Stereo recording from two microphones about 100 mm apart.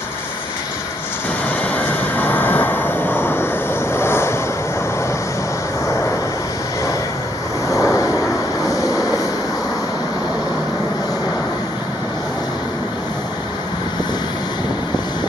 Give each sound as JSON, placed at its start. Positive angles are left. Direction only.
{"t": 2.1, "sound": "vehicle", "side_deg": 20}
{"t": 7.7, "sound": "vehicle", "side_deg": 30}
{"t": 8.6, "sound": "train", "side_deg": 35}